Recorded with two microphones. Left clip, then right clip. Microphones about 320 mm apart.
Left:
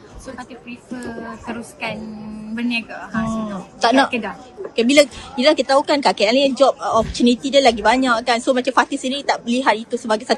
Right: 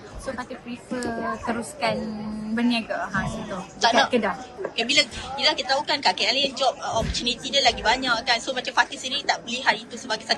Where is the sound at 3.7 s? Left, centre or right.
Centre.